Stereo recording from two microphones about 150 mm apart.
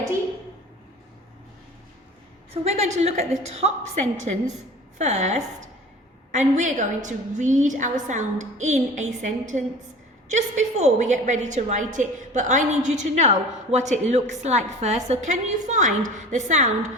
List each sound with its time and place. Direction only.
2.5 s a woman's voice: 45° right (ahead or behind)
6.6 s a woman's voice: 55° right (ahead or behind)